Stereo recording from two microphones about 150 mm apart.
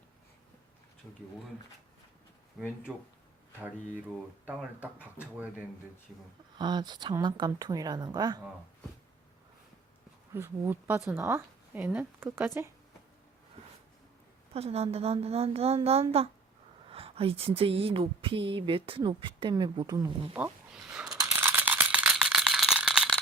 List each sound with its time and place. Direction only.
2.9 s speech: 5° right (ahead or behind)
5.2 s speech: 10° right (ahead or behind)
6.6 s a woman's voice: 30° right (ahead or behind)
10.3 s a woman's voice: 15° right (ahead or behind)
14.5 s a woman's voice: 45° right (ahead or behind)
20.3 s a sound: 10° right (ahead or behind)